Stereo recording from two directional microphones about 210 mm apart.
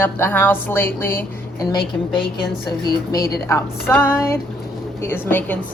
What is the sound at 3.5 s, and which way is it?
A woman's voice, 10° left (ahead or behind).